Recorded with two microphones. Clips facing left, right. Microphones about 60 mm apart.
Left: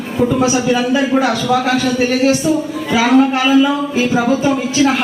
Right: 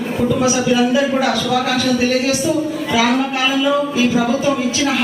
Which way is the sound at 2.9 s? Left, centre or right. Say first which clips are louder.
Left 6 dB; left.